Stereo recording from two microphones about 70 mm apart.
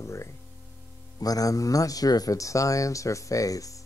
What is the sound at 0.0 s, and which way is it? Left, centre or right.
Speech, left.